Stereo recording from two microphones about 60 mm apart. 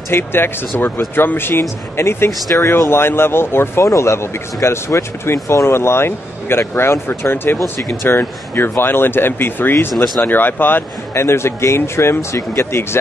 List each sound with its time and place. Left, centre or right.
0.1 s speech: left
3.8 s speech: left
11.2 s speech: left